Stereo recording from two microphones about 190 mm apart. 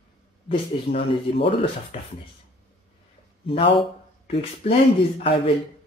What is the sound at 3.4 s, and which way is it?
Speech, 30° left (ahead or behind).